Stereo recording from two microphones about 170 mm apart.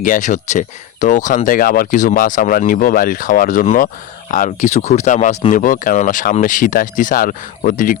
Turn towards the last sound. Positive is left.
turn(degrees=50)  # may be behind; listen again after turning